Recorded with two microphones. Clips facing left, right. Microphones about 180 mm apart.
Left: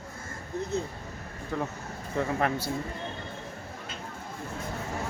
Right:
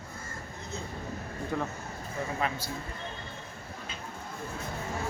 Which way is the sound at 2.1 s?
65° left (ahead or behind).